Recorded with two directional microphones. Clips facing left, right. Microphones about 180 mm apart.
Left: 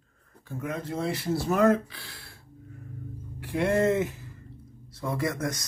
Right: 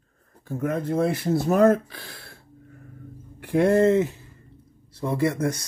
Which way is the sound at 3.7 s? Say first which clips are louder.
Right 3 dB; 30° right (ahead or behind).